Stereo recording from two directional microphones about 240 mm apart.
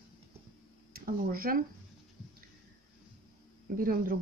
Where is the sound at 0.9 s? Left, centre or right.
Right.